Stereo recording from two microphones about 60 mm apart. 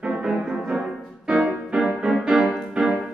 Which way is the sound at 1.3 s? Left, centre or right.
Centre.